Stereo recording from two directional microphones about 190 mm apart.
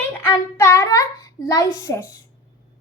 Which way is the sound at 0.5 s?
15° left (ahead or behind).